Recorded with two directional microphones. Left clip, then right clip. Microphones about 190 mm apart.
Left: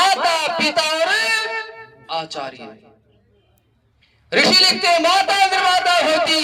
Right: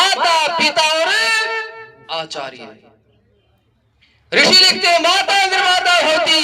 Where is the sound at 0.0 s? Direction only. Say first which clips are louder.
Right 2 dB; 15° right (ahead or behind).